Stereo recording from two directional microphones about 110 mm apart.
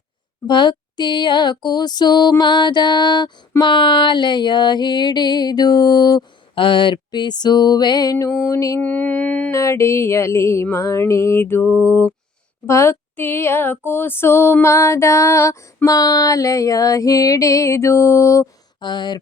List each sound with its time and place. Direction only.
0.4 s music: 45° left (ahead or behind)
8.8 s mantra: 15° left (ahead or behind)
9.5 s female singing: 25° left (ahead or behind)
18.8 s speech: 45° left (ahead or behind)